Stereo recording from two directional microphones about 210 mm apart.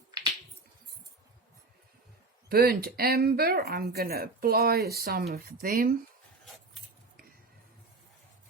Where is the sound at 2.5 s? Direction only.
45° right (ahead or behind).